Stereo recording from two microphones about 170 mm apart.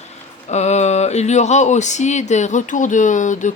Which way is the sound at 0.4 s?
40° left (ahead or behind).